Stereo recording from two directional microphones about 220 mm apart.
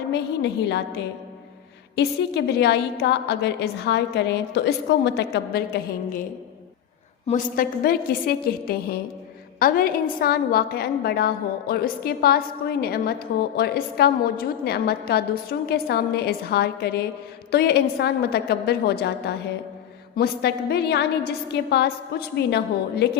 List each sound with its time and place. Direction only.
0.1 s a woman's voice: 50° left (ahead or behind)
7.3 s a woman's voice: 35° left (ahead or behind)